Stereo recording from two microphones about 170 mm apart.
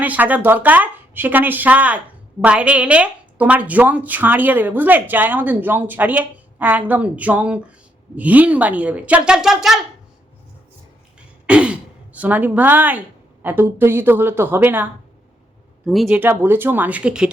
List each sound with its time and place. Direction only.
0.0 s a woman's voice: 10° right (ahead or behind)
11.4 s a woman's voice: 5° right (ahead or behind)
16.0 s a woman's voice: 10° right (ahead or behind)